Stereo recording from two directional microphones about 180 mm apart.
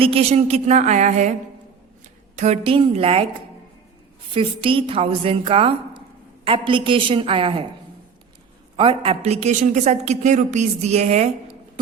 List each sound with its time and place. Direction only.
0.0 s a man's voice: 35° right (ahead or behind)
2.3 s a man's voice: 40° right (ahead or behind)
4.4 s a man's voice: 30° right (ahead or behind)
8.7 s a man's voice: 30° right (ahead or behind)